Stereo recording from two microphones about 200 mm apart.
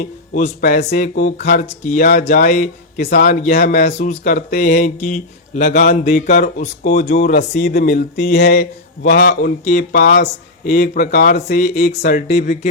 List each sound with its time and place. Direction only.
0.0 s speech: 40° left (ahead or behind)
3.8 s speech: 35° left (ahead or behind)
8.3 s speech: 55° left (ahead or behind)